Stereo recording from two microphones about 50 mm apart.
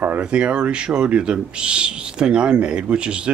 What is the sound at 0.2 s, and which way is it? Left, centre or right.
Speech, right.